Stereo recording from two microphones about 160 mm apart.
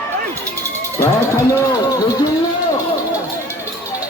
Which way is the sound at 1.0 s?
15° left (ahead or behind).